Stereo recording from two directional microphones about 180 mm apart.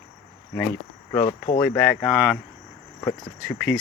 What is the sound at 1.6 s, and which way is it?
Speech, 10° left (ahead or behind).